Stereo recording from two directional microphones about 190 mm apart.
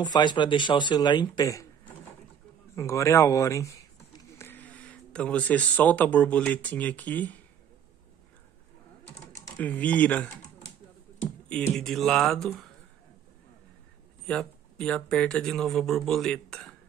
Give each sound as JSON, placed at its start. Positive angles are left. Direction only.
{"t": 0.0, "sound": "speech", "side_deg": 25}
{"t": 2.7, "sound": "speech", "side_deg": 15}
{"t": 9.4, "sound": "speech", "side_deg": 10}
{"t": 14.2, "sound": "speech", "side_deg": 5}